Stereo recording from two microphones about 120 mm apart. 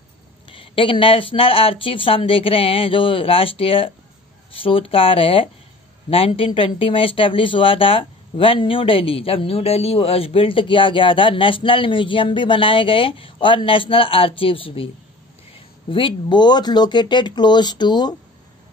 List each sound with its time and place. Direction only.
0.5 s speech: 45° left (ahead or behind)
15.9 s speech: 45° left (ahead or behind)